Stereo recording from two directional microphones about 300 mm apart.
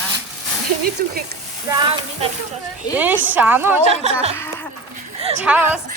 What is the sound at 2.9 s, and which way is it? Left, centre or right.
Speech, centre.